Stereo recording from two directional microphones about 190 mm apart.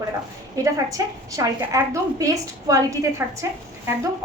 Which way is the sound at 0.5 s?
15° right (ahead or behind).